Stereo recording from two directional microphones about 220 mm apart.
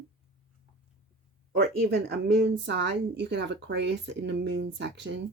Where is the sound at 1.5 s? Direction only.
45° right (ahead or behind).